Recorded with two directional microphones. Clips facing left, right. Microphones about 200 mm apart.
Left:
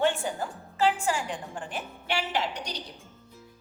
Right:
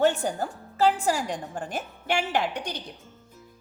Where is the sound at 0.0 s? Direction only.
40° right (ahead or behind).